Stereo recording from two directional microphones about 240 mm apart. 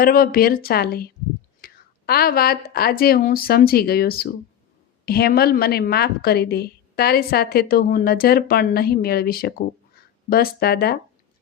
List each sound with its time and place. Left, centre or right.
0.0 s a woman's voice: left